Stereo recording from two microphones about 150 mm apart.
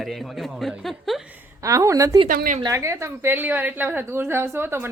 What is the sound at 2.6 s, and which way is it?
A woman's voice, 20° right (ahead or behind).